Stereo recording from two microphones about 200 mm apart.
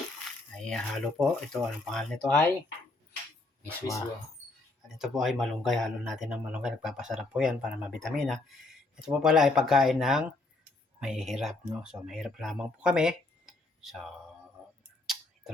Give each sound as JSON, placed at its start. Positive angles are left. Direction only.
{"t": 0.5, "sound": "speech", "side_deg": 5}
{"t": 3.7, "sound": "speech", "side_deg": 15}
{"t": 4.9, "sound": "speech", "side_deg": 0}
{"t": 15.0, "sound": "a sound", "side_deg": 0}